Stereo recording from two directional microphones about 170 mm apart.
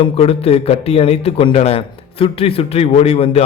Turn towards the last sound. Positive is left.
turn(degrees=35)  # may be behind; listen again after turning